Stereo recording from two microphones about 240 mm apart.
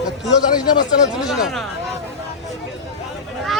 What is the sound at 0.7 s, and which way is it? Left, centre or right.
Speech, centre.